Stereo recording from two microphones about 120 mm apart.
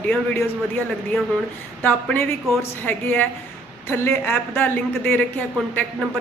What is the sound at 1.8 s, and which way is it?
A woman's voice, 15° left (ahead or behind).